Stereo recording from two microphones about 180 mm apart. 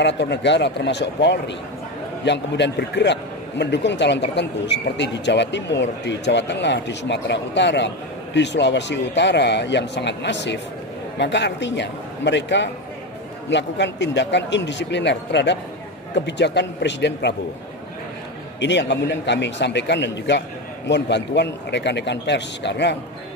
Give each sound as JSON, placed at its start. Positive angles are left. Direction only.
{"t": 0.0, "sound": "speech", "side_deg": 75}
{"t": 18.6, "sound": "speech", "side_deg": 75}